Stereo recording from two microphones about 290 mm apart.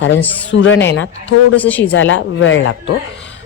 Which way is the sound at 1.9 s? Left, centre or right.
Left.